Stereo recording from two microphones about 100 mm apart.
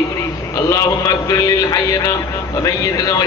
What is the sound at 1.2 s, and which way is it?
A man's voice, 35° left (ahead or behind).